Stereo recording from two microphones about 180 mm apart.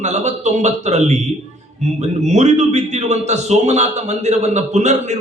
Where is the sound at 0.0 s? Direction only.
40° right (ahead or behind).